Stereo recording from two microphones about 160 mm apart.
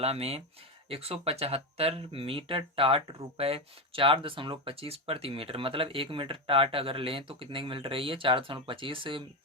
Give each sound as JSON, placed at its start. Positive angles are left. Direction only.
{"t": 0.0, "sound": "speech", "side_deg": -40}